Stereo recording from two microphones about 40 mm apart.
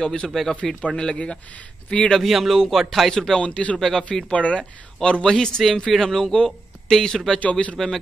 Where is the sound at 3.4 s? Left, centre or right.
Left.